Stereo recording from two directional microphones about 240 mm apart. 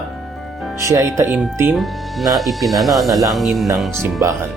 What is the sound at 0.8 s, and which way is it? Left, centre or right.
Speech, centre.